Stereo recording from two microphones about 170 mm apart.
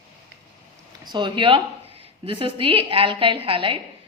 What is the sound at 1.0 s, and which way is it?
A woman's voice, 25° right (ahead or behind).